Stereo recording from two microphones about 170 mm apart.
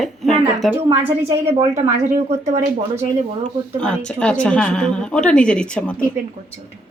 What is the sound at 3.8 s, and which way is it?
Speech, 5° left (ahead or behind).